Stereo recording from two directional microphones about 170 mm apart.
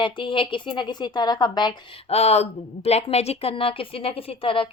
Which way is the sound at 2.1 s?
40° left (ahead or behind).